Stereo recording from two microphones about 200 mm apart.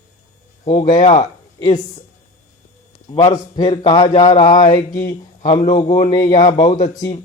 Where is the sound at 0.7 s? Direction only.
35° left (ahead or behind).